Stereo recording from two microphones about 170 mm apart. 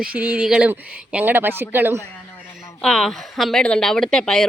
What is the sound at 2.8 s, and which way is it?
Speech, centre (ahead or behind).